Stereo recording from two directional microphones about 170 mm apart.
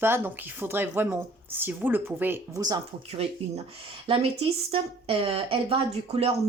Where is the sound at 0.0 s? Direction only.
10° right (ahead or behind).